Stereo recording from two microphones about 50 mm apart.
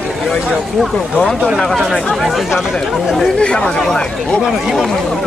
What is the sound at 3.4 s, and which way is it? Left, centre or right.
Speech, centre.